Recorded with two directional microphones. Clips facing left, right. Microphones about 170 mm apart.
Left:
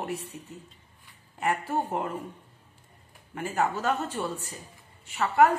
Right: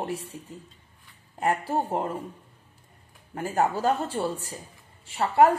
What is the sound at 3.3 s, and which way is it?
A woman's voice, 35° right (ahead or behind).